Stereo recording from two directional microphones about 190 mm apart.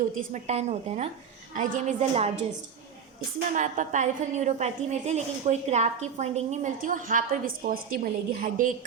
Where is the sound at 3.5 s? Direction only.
40° right (ahead or behind).